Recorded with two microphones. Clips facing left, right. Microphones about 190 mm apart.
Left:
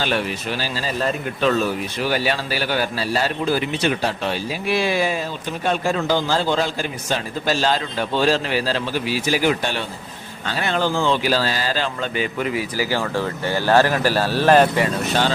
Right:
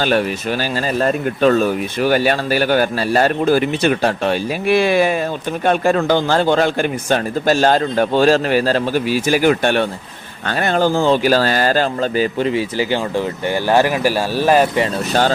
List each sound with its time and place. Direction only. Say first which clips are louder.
0.0 s speech: right 6 dB; 45° right (ahead or behind); by 14.7 s 10° right (ahead or behind)